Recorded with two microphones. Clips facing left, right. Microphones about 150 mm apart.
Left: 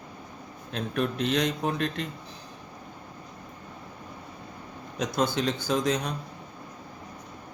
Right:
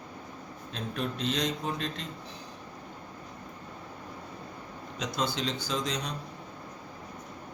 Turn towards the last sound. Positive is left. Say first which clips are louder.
# left 6 dB
turn(degrees=55)  # may be behind; listen again after turning